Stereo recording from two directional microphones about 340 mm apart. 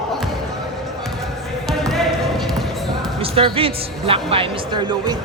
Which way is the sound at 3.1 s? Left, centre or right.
Centre.